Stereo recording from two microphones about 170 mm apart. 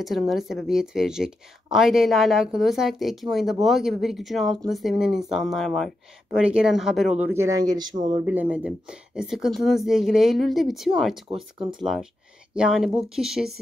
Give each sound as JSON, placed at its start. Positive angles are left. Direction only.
{"t": 0.0, "sound": "a woman's voice", "side_deg": 0}
{"t": 7.2, "sound": "speech", "side_deg": -15}
{"t": 8.3, "sound": "a woman's voice", "side_deg": -10}